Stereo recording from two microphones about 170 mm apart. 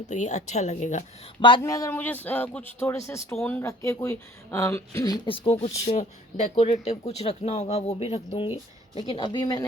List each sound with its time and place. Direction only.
0.1 s speech: 45° left (ahead or behind)
1.4 s speech: 30° left (ahead or behind)
5.9 s speech: 45° left (ahead or behind); by 9.6 s 25° left (ahead or behind)